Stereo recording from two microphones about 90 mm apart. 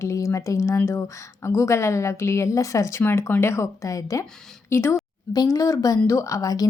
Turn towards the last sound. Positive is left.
turn(degrees=40)  # may be behind; listen again after turning